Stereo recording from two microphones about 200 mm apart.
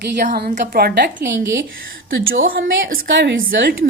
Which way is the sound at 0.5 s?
40° right (ahead or behind).